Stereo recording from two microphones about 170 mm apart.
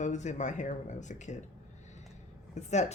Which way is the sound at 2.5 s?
40° left (ahead or behind).